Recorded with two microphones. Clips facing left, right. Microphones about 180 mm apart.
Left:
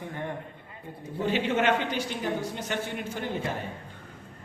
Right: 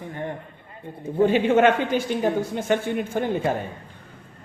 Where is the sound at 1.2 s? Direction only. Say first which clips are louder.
Right 9 dB; 50° right (ahead or behind).